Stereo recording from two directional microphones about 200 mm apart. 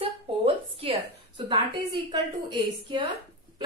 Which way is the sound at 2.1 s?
25° right (ahead or behind).